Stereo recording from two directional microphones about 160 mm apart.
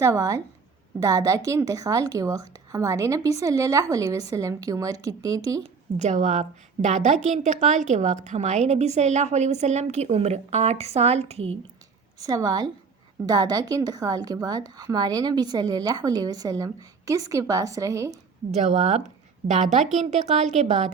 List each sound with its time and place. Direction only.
0.0 s a woman's voice: 20° right (ahead or behind)
6.0 s a woman's voice: 45° right (ahead or behind)
12.2 s a woman's voice: 25° right (ahead or behind)
18.5 s a woman's voice: 45° right (ahead or behind)